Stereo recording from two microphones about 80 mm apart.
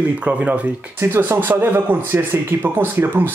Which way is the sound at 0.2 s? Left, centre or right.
Centre.